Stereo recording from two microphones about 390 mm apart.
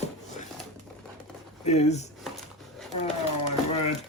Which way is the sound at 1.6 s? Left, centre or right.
Centre.